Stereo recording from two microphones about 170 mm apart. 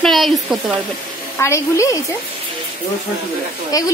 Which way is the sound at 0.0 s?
Centre (ahead or behind).